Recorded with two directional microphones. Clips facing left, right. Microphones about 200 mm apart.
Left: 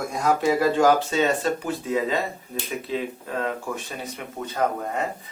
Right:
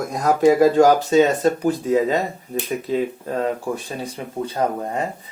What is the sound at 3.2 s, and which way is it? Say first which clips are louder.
Speech: right 5 dB; 35° right (ahead or behind).